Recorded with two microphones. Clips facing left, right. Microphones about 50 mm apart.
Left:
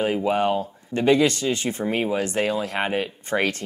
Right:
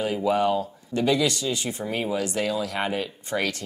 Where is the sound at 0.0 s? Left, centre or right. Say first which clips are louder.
Left 1 dB; left.